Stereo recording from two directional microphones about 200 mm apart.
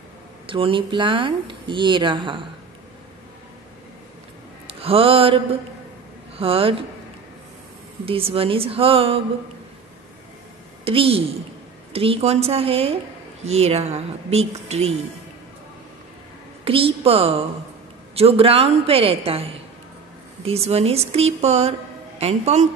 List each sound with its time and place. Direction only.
0.5 s speech: 25° right (ahead or behind)
4.7 s speech: 30° right (ahead or behind)
8.0 s speech: 30° right (ahead or behind)
10.8 s a woman's voice: 30° right (ahead or behind)
16.6 s a woman's voice: 30° right (ahead or behind)